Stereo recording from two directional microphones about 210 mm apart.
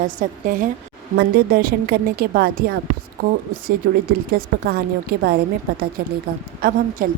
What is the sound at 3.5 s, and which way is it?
A woman's voice, 40° right (ahead or behind).